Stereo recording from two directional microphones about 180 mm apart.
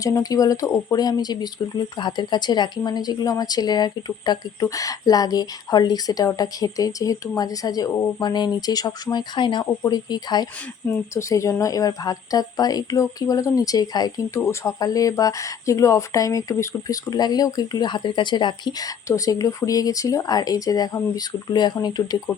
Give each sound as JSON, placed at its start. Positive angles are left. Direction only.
{"t": 0.0, "sound": "speech", "side_deg": 20}